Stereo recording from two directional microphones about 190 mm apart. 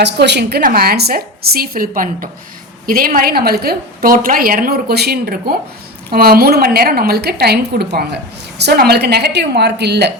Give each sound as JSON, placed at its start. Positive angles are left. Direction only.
{"t": 0.0, "sound": "a woman's voice", "side_deg": -60}